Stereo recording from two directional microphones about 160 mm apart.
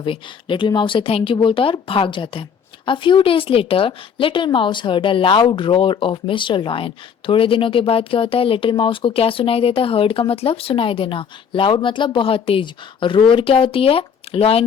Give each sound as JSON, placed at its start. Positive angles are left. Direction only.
{"t": 0.0, "sound": "a woman's voice", "side_deg": 30}